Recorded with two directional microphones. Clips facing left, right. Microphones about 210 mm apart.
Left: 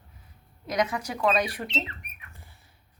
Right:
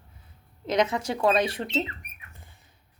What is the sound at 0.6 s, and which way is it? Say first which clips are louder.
Speech: right 3 dB; 25° right (ahead or behind).